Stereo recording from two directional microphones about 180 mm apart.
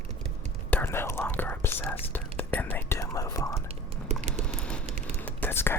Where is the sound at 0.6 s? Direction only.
10° left (ahead or behind).